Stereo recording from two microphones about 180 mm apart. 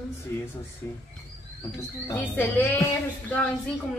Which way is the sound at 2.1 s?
10° left (ahead or behind).